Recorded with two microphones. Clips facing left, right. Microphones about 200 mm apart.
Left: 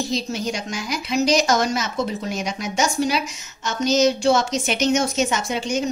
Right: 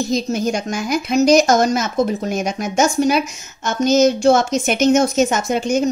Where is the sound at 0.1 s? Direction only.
50° right (ahead or behind).